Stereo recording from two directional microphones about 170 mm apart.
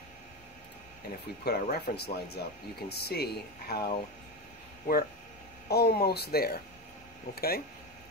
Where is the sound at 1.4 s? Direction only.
65° left (ahead or behind).